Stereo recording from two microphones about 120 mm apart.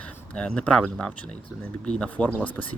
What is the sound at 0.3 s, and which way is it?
Speech, 10° left (ahead or behind).